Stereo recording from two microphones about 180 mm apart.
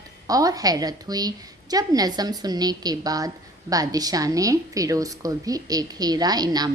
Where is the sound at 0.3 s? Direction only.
20° right (ahead or behind).